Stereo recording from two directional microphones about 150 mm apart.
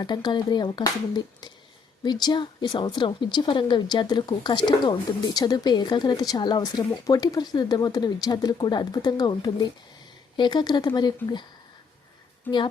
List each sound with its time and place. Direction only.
0.0 s speech: 30° left (ahead or behind)